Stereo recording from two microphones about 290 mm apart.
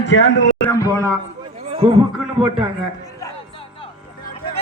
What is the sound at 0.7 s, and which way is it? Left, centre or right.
Speech, centre.